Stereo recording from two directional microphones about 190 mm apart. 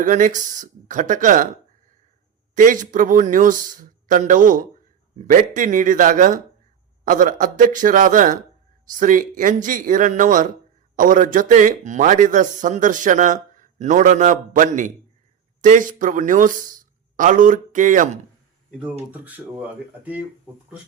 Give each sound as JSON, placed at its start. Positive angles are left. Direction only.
{"t": 0.0, "sound": "speech", "side_deg": -40}
{"t": 2.6, "sound": "speech", "side_deg": -45}
{"t": 19.1, "sound": "speech", "side_deg": -10}